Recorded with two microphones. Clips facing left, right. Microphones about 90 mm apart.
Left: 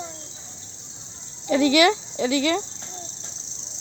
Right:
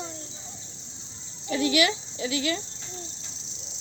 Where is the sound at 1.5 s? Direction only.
80° left.